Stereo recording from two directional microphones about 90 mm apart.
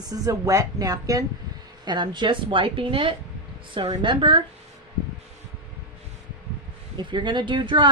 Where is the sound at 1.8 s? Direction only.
60° right (ahead or behind); by 3.1 s 75° right (ahead or behind).